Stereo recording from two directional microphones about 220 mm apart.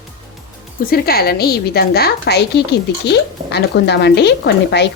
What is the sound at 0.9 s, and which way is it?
A woman's voice, 45° left (ahead or behind).